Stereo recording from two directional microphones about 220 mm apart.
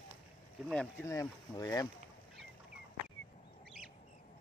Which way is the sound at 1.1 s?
15° left (ahead or behind).